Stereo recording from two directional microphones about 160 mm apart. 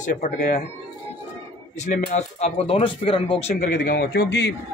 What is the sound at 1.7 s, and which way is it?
Speech, 50° left (ahead or behind).